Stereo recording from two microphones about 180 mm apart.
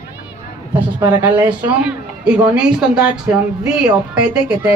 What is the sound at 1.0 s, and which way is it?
A man's voice, 10° right (ahead or behind).